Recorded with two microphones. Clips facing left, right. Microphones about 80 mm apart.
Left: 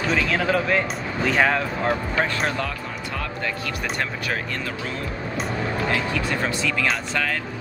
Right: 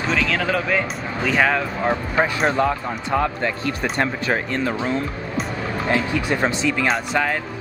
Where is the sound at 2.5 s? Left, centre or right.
Right.